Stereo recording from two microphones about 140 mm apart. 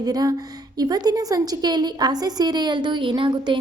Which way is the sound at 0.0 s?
25° right (ahead or behind).